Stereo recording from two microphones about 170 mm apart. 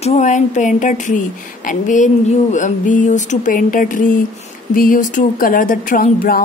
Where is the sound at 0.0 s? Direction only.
45° left (ahead or behind).